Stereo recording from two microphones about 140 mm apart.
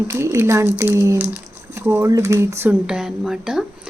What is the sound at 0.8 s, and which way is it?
Speech, 20° right (ahead or behind).